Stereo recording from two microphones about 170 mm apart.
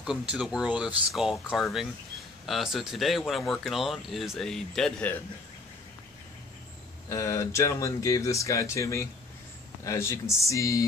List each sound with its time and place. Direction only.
0.0 s speech: 5° right (ahead or behind)
7.1 s speech: 20° left (ahead or behind)